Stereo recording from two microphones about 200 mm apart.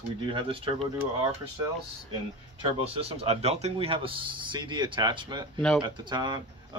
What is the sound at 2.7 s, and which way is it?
Speech, 30° right (ahead or behind).